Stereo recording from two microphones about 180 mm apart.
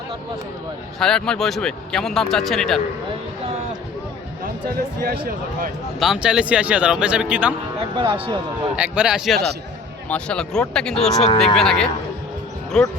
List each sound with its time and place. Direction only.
0.9 s speech: 5° left (ahead or behind)
6.0 s speech: 5° right (ahead or behind)
7.8 s speech: 30° right (ahead or behind)
8.7 s speech: 5° right (ahead or behind)